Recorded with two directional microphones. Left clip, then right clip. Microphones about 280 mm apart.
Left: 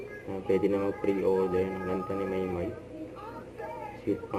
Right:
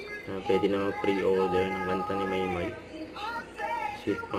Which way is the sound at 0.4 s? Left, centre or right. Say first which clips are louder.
Right 1 dB; centre.